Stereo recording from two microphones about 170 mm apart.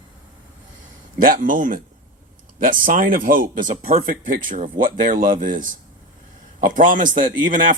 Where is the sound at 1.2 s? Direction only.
50° right (ahead or behind).